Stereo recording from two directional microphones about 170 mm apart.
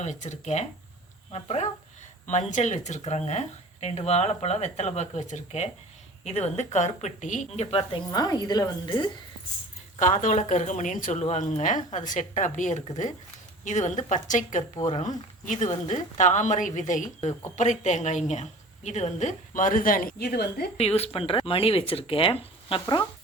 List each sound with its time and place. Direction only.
0.0 s a woman's voice: 45° left (ahead or behind); by 9.0 s 25° left (ahead or behind)
10.0 s a woman's voice: 50° left (ahead or behind); by 20.7 s 70° left (ahead or behind)
20.7 s speech: 35° left (ahead or behind)